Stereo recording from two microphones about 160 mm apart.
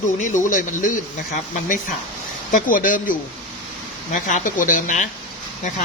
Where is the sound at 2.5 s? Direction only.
55° left (ahead or behind).